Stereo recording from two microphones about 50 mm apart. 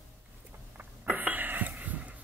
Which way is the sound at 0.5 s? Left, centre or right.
Right.